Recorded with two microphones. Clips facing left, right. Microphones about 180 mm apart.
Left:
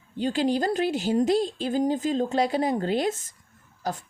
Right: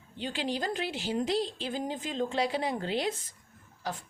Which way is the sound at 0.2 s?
40° left (ahead or behind).